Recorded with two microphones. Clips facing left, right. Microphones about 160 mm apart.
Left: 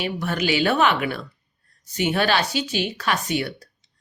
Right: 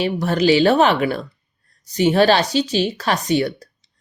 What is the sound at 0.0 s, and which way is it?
A woman's voice, 35° right (ahead or behind).